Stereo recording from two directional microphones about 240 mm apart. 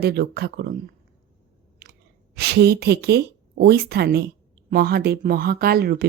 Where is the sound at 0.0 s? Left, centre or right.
Right.